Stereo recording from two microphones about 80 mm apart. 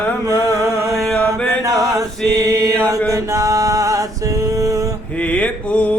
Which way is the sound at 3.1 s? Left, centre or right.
Right.